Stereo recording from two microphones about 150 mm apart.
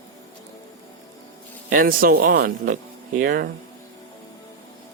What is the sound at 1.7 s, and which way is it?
Speech, 70° right (ahead or behind).